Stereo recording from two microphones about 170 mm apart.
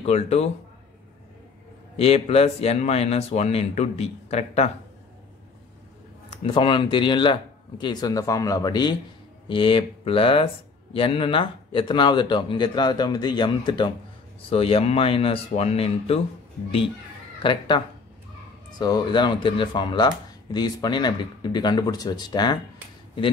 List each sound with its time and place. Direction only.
0.0 s speech: 40° left (ahead or behind)
2.0 s speech: 35° left (ahead or behind)
6.3 s speech: 30° left (ahead or behind)
17.4 s speech: 30° left (ahead or behind)